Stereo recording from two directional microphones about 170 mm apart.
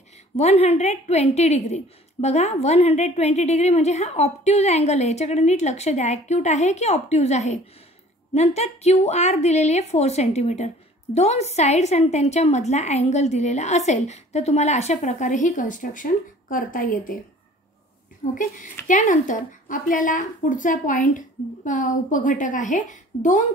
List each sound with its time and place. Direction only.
0.4 s a woman's voice: 35° left (ahead or behind); by 17.2 s 55° left (ahead or behind)
18.2 s speech: 50° left (ahead or behind)